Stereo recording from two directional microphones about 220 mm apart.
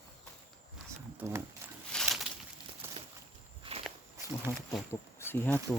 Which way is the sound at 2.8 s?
10° right (ahead or behind).